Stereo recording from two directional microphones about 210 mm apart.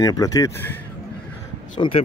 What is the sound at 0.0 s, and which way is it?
Speech, 15° left (ahead or behind).